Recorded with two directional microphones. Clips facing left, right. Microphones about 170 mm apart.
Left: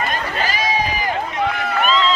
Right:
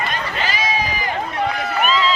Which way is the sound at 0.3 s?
45° left (ahead or behind).